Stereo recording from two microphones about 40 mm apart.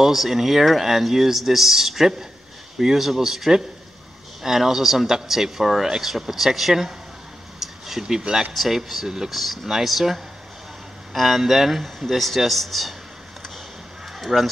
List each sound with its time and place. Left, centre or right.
0.0 s speech: centre
7.5 s a sound: centre
8.0 s speech: centre
14.2 s speech: centre